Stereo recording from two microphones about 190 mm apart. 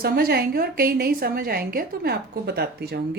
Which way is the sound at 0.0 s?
55° right (ahead or behind).